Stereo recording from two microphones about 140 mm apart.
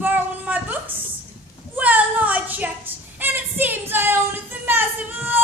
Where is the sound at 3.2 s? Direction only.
15° right (ahead or behind).